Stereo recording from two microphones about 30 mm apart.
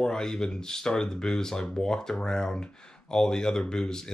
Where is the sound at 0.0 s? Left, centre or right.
Left.